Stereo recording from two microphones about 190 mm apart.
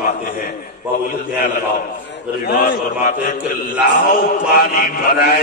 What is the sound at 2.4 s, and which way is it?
A man's voice, 50° left (ahead or behind).